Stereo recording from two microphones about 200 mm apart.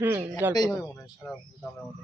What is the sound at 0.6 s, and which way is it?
Speech, 15° left (ahead or behind).